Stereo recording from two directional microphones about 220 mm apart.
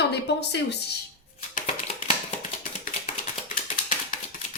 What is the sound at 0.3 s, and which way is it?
Speech, 50° left (ahead or behind).